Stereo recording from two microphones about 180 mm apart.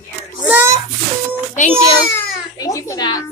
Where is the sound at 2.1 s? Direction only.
20° left (ahead or behind).